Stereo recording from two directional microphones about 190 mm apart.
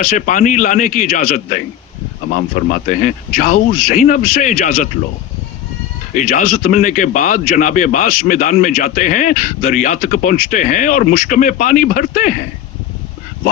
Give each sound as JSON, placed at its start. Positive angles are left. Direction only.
{"t": 0.0, "sound": "a man's voice", "side_deg": 45}
{"t": 6.1, "sound": "a man's voice", "side_deg": 50}